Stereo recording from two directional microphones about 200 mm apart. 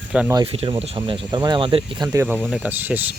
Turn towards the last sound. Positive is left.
turn(degrees=-10)  # may be behind; listen again after turning